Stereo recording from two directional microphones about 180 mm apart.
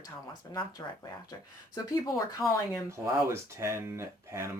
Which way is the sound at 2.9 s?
15° right (ahead or behind).